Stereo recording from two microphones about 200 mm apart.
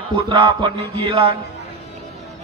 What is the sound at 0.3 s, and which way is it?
Music, 25° right (ahead or behind).